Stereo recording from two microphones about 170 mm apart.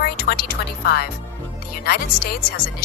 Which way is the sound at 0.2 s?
65° left (ahead or behind).